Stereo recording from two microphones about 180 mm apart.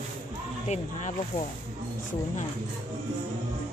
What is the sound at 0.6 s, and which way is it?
Speech, 40° left (ahead or behind).